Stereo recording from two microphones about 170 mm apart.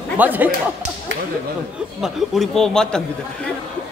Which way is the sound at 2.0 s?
Centre (ahead or behind).